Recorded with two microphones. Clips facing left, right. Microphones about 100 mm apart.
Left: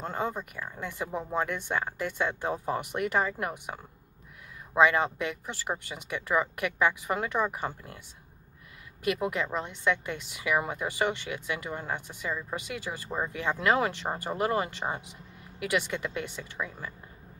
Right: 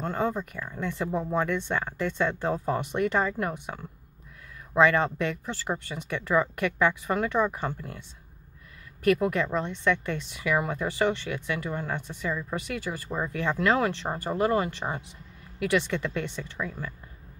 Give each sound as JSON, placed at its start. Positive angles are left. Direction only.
{"t": 0.0, "sound": "a woman's voice", "side_deg": 15}
{"t": 9.0, "sound": "a woman's voice", "side_deg": 15}